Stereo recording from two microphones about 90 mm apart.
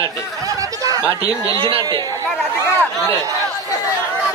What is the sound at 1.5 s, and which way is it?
Speech, 40° left (ahead or behind).